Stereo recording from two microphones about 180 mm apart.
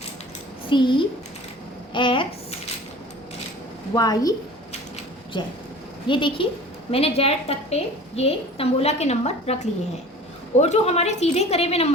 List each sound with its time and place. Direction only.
0.7 s a woman's voice: 25° left (ahead or behind)
1.9 s a sound: 25° left (ahead or behind)
3.9 s a woman's voice: 20° left (ahead or behind)